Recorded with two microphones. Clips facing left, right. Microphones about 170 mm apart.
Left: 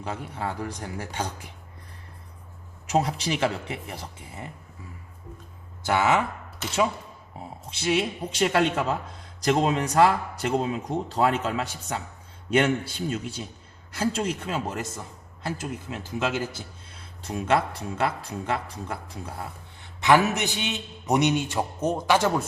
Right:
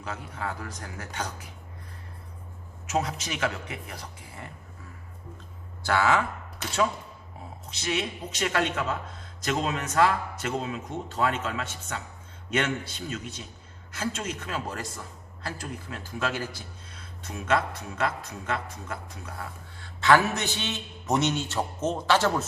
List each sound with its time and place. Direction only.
0.0 s speech: 30° left (ahead or behind)
2.8 s speech: 30° left (ahead or behind)
5.8 s speech: 20° left (ahead or behind)
7.7 s a man's voice: 30° left (ahead or behind)
19.8 s a man's voice: 15° left (ahead or behind)